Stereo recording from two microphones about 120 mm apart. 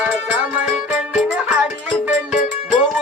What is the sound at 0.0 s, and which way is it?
Music, 10° right (ahead or behind).